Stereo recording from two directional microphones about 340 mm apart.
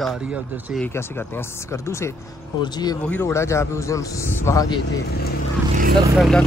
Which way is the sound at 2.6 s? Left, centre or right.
Centre.